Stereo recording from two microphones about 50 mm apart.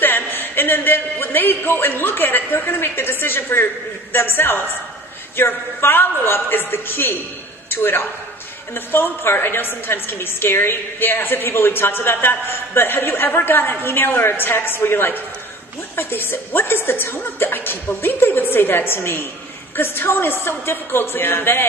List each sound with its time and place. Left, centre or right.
0.0 s a man's voice: left